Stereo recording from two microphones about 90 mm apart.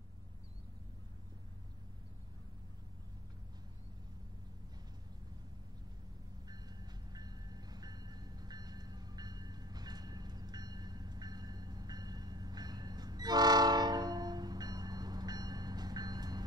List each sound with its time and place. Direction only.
6.4 s train: 50° right (ahead or behind)